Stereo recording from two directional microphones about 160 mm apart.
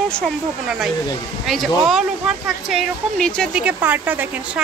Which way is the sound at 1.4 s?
Centre (ahead or behind).